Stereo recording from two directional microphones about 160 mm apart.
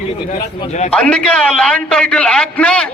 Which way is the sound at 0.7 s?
45° left (ahead or behind).